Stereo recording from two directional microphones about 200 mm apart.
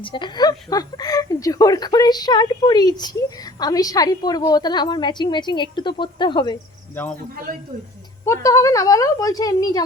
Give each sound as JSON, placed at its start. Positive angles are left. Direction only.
{"t": 0.0, "sound": "speech", "side_deg": 25}
{"t": 7.0, "sound": "speech", "side_deg": 10}
{"t": 8.2, "sound": "speech", "side_deg": 15}